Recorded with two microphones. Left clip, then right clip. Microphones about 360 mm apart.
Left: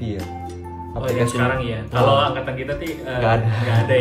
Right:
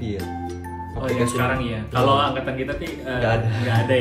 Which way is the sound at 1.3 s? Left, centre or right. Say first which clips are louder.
Left 2 dB; centre.